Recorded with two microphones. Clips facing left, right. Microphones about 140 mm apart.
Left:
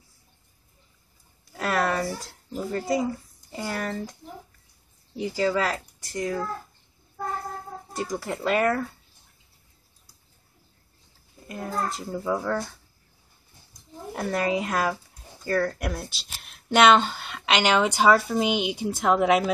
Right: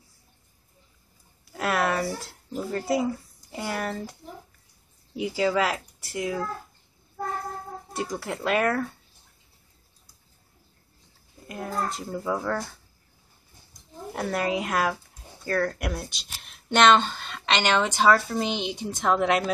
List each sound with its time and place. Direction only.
1.4 s a sound: 5° right (ahead or behind)
3.5 s speech: 5° right (ahead or behind)
8.2 s speech: centre (ahead or behind)
11.4 s speech: centre (ahead or behind)
14.1 s speech: centre (ahead or behind)